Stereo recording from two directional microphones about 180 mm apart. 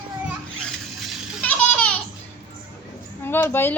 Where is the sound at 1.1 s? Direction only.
10° left (ahead or behind).